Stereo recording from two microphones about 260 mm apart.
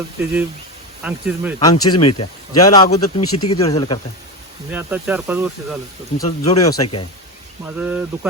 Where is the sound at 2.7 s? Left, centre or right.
Left.